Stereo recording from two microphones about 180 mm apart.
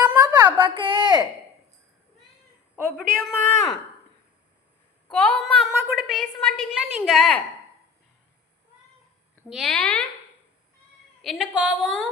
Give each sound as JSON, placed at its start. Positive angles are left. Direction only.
{"t": 0.0, "sound": "a sound", "side_deg": -10}
{"t": 0.3, "sound": "a sound", "side_deg": -25}
{"t": 2.8, "sound": "a woman's voice", "side_deg": -50}
{"t": 3.2, "sound": "speech", "side_deg": 5}
{"t": 5.1, "sound": "speech", "side_deg": 5}
{"t": 5.6, "sound": "a woman's voice", "side_deg": -5}
{"t": 9.5, "sound": "a woman's voice", "side_deg": 0}
{"t": 11.2, "sound": "a woman's voice", "side_deg": 0}